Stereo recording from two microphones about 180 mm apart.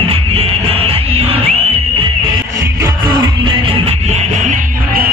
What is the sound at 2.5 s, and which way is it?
Music, 20° right (ahead or behind).